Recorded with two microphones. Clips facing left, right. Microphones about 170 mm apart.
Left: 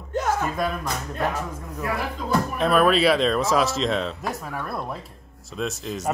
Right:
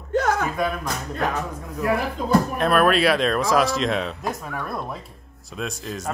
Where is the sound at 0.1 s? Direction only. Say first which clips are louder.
Right 3 dB; 75° right (ahead or behind).